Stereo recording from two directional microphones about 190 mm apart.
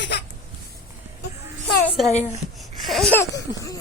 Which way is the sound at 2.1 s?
35° left (ahead or behind).